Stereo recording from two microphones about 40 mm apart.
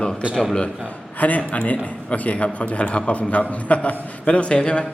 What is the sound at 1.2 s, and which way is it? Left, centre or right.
A man's voice, left.